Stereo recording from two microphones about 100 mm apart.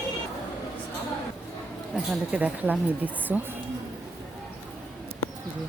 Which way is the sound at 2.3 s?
10° right (ahead or behind).